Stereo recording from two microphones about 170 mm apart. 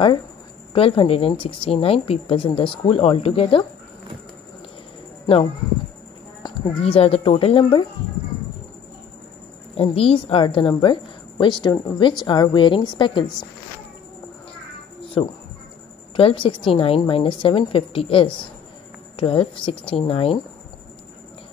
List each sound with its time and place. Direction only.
0.7 s speech: 35° left (ahead or behind)
5.2 s speech: 30° left (ahead or behind)
6.4 s a sound: 25° left (ahead or behind)
6.8 s speech: 35° left (ahead or behind)
9.8 s a woman's voice: 35° left (ahead or behind)
15.2 s speech: 35° left (ahead or behind)